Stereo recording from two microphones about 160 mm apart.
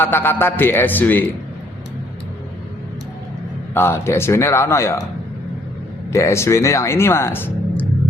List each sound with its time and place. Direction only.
0.0 s speech: 15° left (ahead or behind)
3.8 s speech: 15° left (ahead or behind)
6.1 s speech: 15° left (ahead or behind)